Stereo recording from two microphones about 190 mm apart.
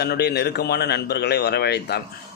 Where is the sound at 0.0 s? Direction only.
60° left (ahead or behind).